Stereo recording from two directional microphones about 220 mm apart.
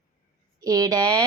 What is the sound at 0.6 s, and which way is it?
Speech, 15° right (ahead or behind).